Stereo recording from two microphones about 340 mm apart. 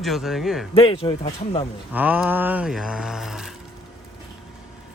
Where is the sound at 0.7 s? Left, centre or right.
Centre.